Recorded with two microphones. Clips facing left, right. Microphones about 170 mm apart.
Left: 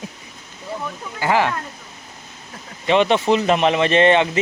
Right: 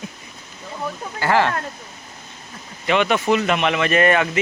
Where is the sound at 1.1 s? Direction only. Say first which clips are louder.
Even; 15° left (ahead or behind).